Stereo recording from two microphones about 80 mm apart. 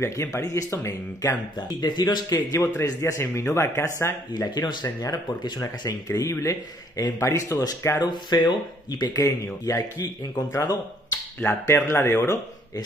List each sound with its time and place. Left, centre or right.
0.0 s speech: left
1.8 s speech: left
2.3 s speech: left
4.3 s speech: left
6.0 s speech: left
8.0 s speech: left
9.1 s speech: left
11.4 s speech: left